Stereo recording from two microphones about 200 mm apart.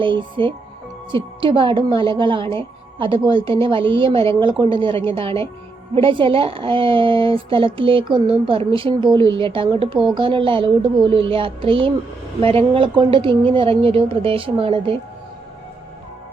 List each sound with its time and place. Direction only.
0.0 s a woman's voice: 25° right (ahead or behind)